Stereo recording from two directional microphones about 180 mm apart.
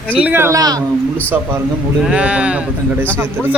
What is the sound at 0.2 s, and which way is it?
Speech, 10° right (ahead or behind).